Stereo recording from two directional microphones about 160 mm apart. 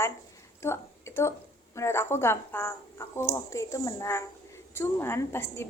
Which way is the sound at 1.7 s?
15° left (ahead or behind).